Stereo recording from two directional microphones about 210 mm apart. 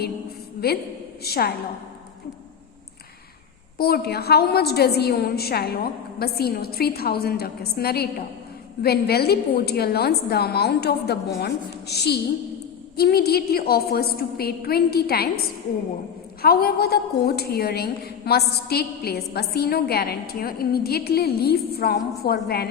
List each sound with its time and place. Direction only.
0.6 s a woman's voice: 45° left (ahead or behind)
3.8 s a woman's voice: 45° left (ahead or behind)
16.4 s a woman's voice: 45° left (ahead or behind)